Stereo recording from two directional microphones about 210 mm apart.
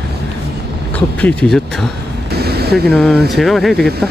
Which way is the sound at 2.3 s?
50° right (ahead or behind).